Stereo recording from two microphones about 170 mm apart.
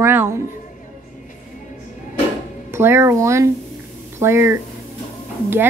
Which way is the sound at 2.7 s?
15° right (ahead or behind).